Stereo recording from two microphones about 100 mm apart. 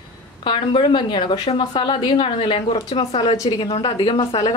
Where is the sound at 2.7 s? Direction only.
90° left.